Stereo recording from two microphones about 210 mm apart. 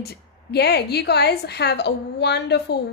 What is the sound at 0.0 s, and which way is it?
A woman's voice, 50° left (ahead or behind).